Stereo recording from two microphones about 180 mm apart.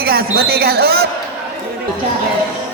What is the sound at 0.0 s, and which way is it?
Speech, 55° right (ahead or behind).